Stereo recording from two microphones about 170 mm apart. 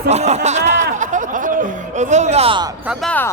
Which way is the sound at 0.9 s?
50° right (ahead or behind).